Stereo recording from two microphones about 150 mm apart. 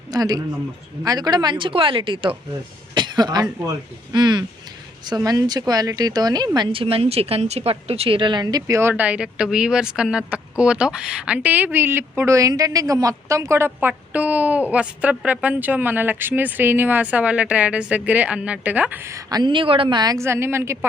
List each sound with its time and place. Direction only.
0.1 s a woman's voice: 25° right (ahead or behind)
2.9 s a sound: 30° right (ahead or behind)
4.1 s a woman's voice: 30° right (ahead or behind)